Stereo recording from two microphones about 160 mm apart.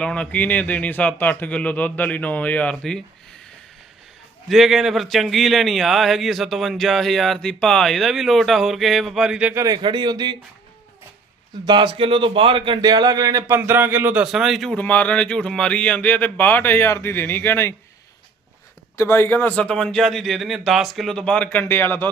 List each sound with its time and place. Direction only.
0.0 s a man's voice: 5° left (ahead or behind)
4.4 s speech: centre (ahead or behind)
9.6 s a man's voice: 25° right (ahead or behind)
11.6 s a man's voice: 30° right (ahead or behind); by 17.7 s 15° left (ahead or behind)
18.9 s a man's voice: 15° left (ahead or behind)